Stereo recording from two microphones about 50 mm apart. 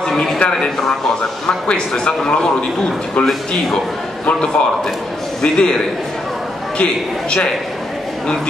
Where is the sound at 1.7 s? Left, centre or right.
Centre.